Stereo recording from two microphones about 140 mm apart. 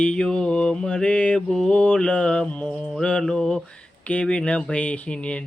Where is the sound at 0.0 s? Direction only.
5° left (ahead or behind).